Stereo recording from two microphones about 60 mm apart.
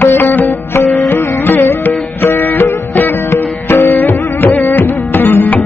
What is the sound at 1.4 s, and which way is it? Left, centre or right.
Music, left.